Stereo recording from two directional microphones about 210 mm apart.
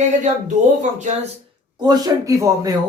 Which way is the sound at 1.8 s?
15° right (ahead or behind).